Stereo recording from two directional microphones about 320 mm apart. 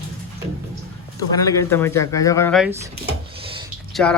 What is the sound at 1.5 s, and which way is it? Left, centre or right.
Speech, centre.